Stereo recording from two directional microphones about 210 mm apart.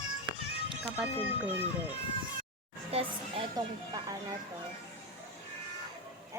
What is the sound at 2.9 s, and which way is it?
Speech, 30° right (ahead or behind).